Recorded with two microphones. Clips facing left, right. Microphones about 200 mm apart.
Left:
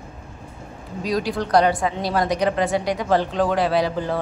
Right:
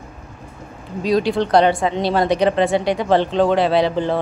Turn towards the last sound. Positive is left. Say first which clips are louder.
# right 4 dB
turn(degrees=-25)  # may be behind; listen again after turning